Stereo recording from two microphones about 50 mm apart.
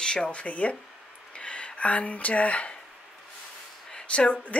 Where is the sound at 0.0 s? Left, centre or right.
Centre.